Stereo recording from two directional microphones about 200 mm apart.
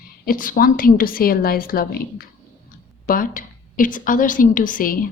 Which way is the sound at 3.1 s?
45° left (ahead or behind).